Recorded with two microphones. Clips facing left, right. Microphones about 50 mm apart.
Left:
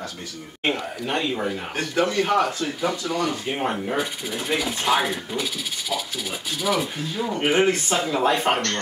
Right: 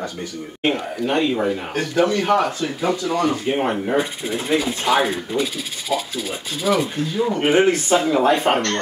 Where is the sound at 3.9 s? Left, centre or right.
Right.